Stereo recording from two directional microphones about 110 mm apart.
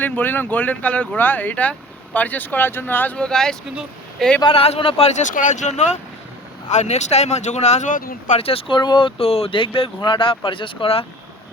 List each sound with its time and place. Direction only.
0.0 s speech: 15° left (ahead or behind)
4.4 s speech: 60° left (ahead or behind); by 7.9 s 90° left
8.3 s speech: 60° left (ahead or behind)